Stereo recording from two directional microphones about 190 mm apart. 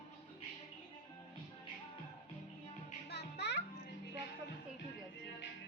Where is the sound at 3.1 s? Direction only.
60° left (ahead or behind).